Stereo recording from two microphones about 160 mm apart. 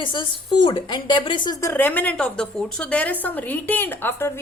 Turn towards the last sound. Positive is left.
turn(degrees=15)  # may be behind; listen again after turning